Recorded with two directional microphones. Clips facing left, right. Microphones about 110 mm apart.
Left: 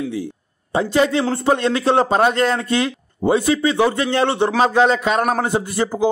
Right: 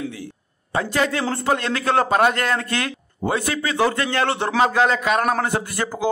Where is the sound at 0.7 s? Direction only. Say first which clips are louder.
Left 5 dB; 20° left (ahead or behind).